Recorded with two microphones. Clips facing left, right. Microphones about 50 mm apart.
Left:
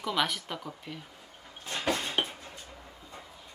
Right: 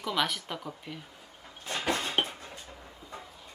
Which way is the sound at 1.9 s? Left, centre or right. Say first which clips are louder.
Right 1 dB; right.